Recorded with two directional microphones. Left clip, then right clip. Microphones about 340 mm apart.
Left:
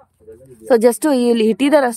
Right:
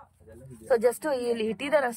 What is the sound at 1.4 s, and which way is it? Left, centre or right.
Speech, centre.